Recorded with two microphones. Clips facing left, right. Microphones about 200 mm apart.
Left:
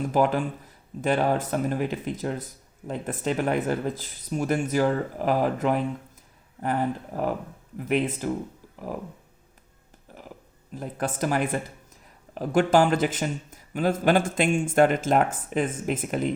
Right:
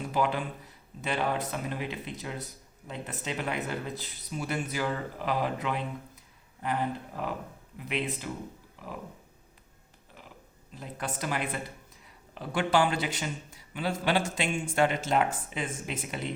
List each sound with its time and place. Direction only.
0.1 s speech: 45° left (ahead or behind)
10.8 s speech: 50° left (ahead or behind)